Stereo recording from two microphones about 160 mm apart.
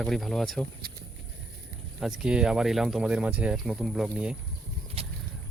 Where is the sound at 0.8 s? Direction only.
70° right (ahead or behind).